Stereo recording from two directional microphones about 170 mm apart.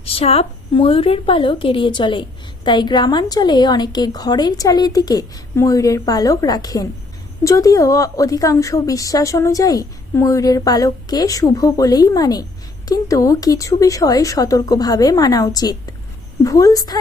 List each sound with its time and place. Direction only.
0.0 s a woman's voice: 35° left (ahead or behind)